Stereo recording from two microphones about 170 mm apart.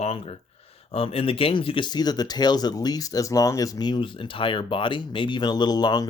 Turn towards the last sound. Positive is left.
turn(degrees=25)  # may be behind; listen again after turning